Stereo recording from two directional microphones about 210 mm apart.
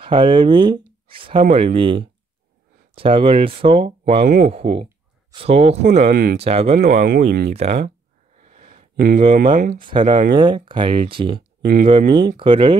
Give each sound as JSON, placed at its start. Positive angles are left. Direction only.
{"t": 0.0, "sound": "speech", "side_deg": -25}
{"t": 4.2, "sound": "speech", "side_deg": -40}
{"t": 4.5, "sound": "speech", "side_deg": -25}
{"t": 5.9, "sound": "speech", "side_deg": -45}
{"t": 6.3, "sound": "speech", "side_deg": -30}
{"t": 6.8, "sound": "speech", "side_deg": -40}
{"t": 7.5, "sound": "speech", "side_deg": -30}
{"t": 8.5, "sound": "a sound", "side_deg": -30}
{"t": 9.3, "sound": "speech", "side_deg": -40}
{"t": 9.8, "sound": "speech", "side_deg": -25}
{"t": 11.6, "sound": "speech", "side_deg": -40}
{"t": 12.1, "sound": "speech", "side_deg": -20}